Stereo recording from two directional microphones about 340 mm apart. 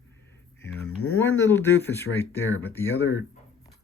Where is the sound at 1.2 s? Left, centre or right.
Centre.